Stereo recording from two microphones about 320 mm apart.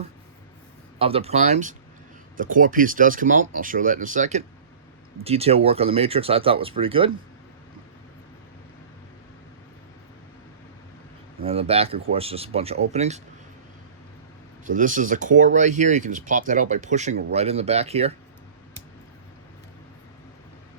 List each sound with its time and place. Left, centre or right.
0.9 s speech: centre
11.4 s speech: centre
14.6 s speech: right